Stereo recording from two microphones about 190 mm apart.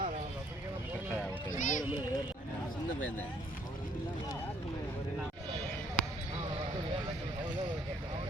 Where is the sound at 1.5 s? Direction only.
40° left (ahead or behind).